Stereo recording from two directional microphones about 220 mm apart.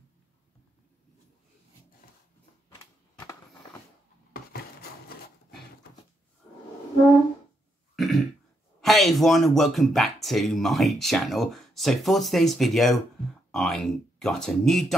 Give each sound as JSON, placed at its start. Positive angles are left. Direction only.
{"t": 4.3, "sound": "a sound", "side_deg": 40}
{"t": 7.9, "sound": "throat clearing", "side_deg": 0}
{"t": 8.8, "sound": "speech", "side_deg": 0}